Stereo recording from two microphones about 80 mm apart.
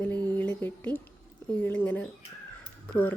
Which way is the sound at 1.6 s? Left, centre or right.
Centre.